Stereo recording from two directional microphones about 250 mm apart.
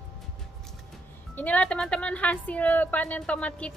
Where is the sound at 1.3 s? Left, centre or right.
Centre.